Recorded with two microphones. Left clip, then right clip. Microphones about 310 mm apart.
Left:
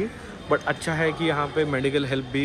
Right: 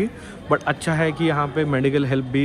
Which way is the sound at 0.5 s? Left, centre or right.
Right.